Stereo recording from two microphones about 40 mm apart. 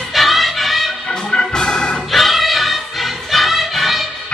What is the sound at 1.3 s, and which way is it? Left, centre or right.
Organ, centre.